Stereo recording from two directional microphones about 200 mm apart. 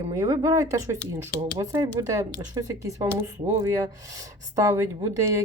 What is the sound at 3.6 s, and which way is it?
Speech, 15° right (ahead or behind).